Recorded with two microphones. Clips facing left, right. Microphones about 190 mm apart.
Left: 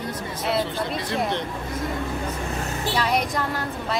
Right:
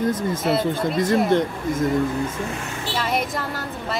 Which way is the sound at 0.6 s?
45° right (ahead or behind).